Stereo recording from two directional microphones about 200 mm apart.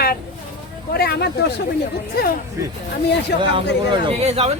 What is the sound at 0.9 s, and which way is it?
Speech, 55° left (ahead or behind).